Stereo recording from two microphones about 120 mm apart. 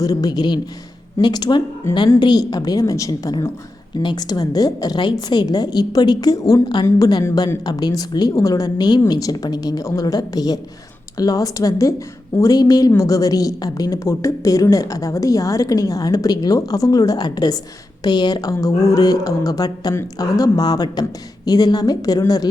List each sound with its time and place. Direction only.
0.0 s a woman's voice: 30° left (ahead or behind)